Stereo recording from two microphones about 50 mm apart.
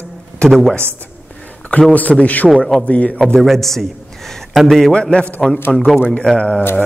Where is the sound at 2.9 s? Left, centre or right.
Left.